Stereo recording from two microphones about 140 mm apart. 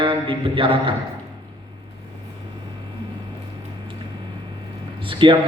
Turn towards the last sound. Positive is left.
turn(degrees=-35)  # may be behind; listen again after turning